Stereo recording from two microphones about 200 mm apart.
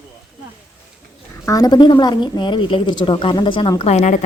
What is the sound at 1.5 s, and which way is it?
A woman's voice, 20° left (ahead or behind).